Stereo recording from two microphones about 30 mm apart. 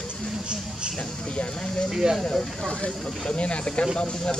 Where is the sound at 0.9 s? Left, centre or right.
Left.